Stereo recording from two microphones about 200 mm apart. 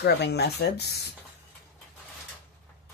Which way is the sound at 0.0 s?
55° left (ahead or behind).